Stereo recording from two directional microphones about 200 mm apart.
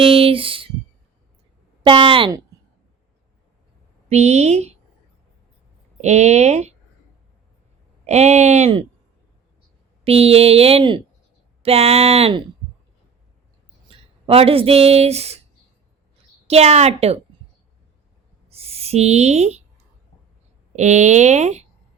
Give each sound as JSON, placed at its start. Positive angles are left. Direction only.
{"t": 0.0, "sound": "speech", "side_deg": -30}
{"t": 1.8, "sound": "speech", "side_deg": -25}
{"t": 4.1, "sound": "speech", "side_deg": -35}
{"t": 6.0, "sound": "speech", "side_deg": -35}
{"t": 8.0, "sound": "speech", "side_deg": -35}
{"t": 10.0, "sound": "speech", "side_deg": -30}
{"t": 13.8, "sound": "speech", "side_deg": -30}
{"t": 16.5, "sound": "speech", "side_deg": -30}
{"t": 18.5, "sound": "speech", "side_deg": -30}
{"t": 20.7, "sound": "speech", "side_deg": -35}